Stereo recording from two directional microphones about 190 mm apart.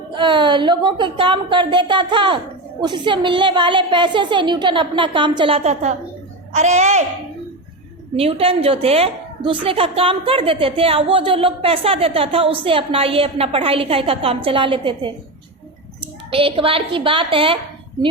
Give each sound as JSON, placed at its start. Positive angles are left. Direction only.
{"t": 0.1, "sound": "a woman's voice", "side_deg": -25}
{"t": 8.1, "sound": "a woman's voice", "side_deg": -30}
{"t": 16.3, "sound": "a woman's voice", "side_deg": -30}